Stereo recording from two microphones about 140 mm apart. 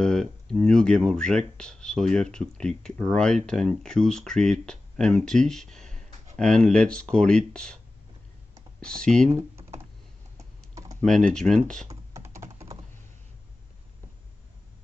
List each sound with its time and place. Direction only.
0.0 s speech: 5° left (ahead or behind)
8.8 s speech: 5° left (ahead or behind)
10.7 s typing: 25° right (ahead or behind)
11.0 s speech: 5° left (ahead or behind)
11.9 s computer keyboard: 20° right (ahead or behind)